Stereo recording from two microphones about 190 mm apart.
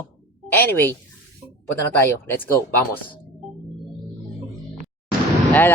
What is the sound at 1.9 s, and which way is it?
Speech, 10° left (ahead or behind).